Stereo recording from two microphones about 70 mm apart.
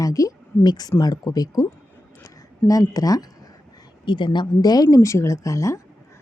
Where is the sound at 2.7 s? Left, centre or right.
Left.